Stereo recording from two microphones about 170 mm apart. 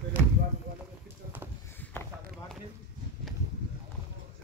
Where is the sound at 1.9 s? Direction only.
15° left (ahead or behind).